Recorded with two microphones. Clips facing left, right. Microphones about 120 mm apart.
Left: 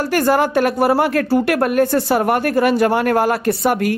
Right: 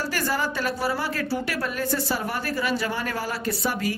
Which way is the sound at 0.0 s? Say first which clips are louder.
Left 11 dB; 55° left (ahead or behind).